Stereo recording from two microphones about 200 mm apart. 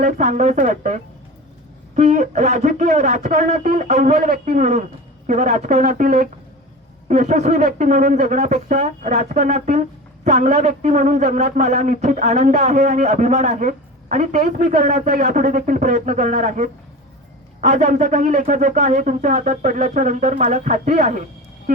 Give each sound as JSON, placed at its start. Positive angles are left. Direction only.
{"t": 0.0, "sound": "a man's voice", "side_deg": -35}
{"t": 2.0, "sound": "a man's voice", "side_deg": -35}